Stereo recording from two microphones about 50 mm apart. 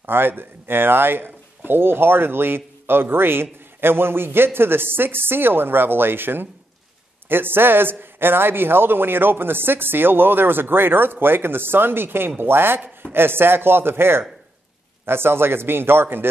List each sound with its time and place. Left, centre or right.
0.0 s a man's voice: right